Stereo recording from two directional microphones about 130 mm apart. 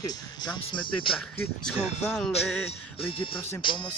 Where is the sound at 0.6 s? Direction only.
40° left (ahead or behind).